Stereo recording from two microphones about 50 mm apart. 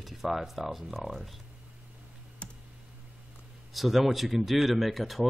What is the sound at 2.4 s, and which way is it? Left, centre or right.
Computer keyboard, left.